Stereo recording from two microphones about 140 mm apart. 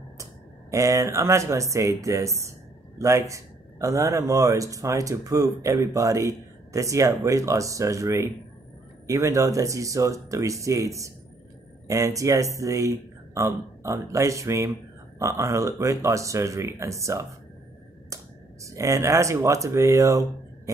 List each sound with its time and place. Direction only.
0.2 s speech: 20° right (ahead or behind)